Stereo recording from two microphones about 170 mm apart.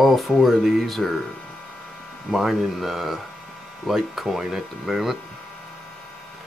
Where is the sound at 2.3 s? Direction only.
Centre (ahead or behind).